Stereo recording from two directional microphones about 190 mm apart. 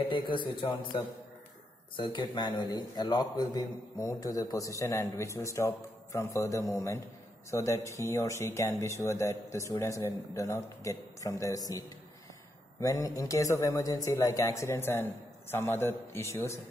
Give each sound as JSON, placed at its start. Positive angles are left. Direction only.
{"t": 0.1, "sound": "speech", "side_deg": 25}
{"t": 2.0, "sound": "a man's voice", "side_deg": 25}
{"t": 12.8, "sound": "a man's voice", "side_deg": 15}